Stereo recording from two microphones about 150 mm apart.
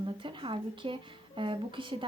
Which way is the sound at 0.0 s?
35° right (ahead or behind).